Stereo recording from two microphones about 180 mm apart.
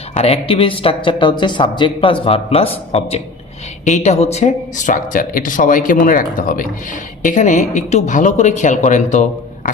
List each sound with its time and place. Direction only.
0.2 s speech: 30° left (ahead or behind)
3.8 s speech: 40° left (ahead or behind)